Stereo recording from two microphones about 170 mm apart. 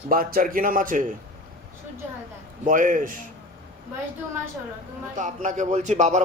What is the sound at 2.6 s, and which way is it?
Speech, 50° right (ahead or behind).